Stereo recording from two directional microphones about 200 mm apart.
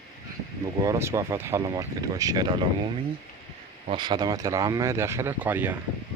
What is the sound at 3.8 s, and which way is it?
Speech, 20° right (ahead or behind).